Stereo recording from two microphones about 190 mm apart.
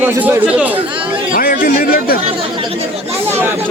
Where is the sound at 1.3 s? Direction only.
50° left (ahead or behind).